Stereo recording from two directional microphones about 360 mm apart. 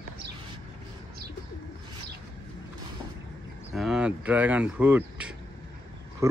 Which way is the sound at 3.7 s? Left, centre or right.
Centre.